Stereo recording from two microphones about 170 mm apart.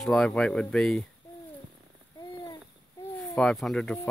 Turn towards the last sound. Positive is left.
turn(degrees=0)  # may be behind; listen again after turning